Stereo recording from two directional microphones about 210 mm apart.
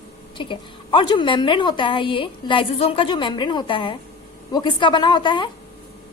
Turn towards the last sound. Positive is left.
turn(degrees=20)  # may be behind; listen again after turning